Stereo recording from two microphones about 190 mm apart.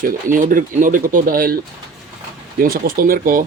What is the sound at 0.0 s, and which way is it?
Speech, 45° right (ahead or behind).